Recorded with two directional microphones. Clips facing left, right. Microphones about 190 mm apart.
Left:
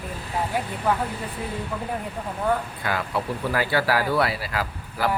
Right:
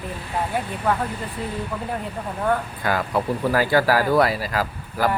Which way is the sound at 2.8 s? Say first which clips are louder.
Right 4 dB; 45° right (ahead or behind).